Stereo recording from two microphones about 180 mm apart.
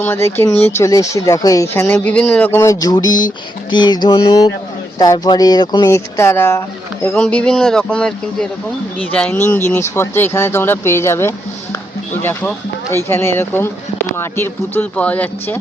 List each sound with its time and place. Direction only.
0.0 s speech: 15° left (ahead or behind)